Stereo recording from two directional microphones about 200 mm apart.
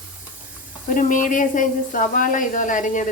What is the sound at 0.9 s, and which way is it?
A woman's voice, 40° left (ahead or behind).